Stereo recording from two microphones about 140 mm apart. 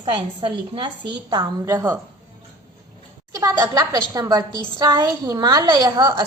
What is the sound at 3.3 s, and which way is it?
A woman's voice, 30° right (ahead or behind).